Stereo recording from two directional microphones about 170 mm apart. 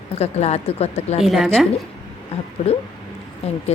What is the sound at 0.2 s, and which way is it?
Speech, 40° left (ahead or behind).